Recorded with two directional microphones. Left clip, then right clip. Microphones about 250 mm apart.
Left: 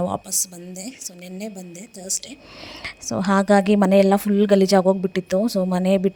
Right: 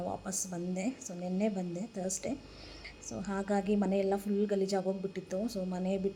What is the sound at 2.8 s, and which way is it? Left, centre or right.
Speech, left.